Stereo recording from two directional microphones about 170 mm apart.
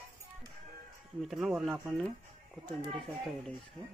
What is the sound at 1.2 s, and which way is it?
Speech, centre (ahead or behind).